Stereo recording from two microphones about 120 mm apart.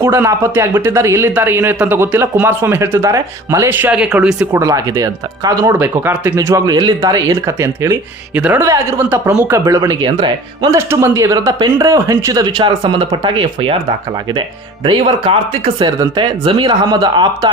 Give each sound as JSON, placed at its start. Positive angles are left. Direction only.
{"t": 0.0, "sound": "speech", "side_deg": -20}
{"t": 4.5, "sound": "speech", "side_deg": -30}
{"t": 5.8, "sound": "speech", "side_deg": -20}
{"t": 6.3, "sound": "speech", "side_deg": -30}
{"t": 10.7, "sound": "speech", "side_deg": -20}
{"t": 14.8, "sound": "speech", "side_deg": -45}